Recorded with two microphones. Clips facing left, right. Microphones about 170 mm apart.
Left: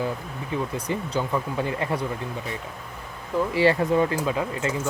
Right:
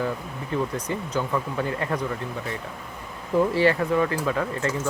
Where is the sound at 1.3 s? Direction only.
15° left (ahead or behind).